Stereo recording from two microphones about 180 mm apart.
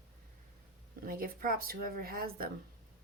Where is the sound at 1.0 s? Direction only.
55° right (ahead or behind).